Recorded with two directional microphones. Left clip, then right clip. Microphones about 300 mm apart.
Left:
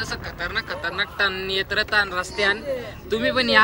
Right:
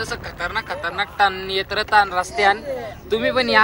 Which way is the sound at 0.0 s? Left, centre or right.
Centre.